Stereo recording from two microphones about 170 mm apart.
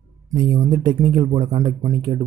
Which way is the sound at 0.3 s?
25° right (ahead or behind).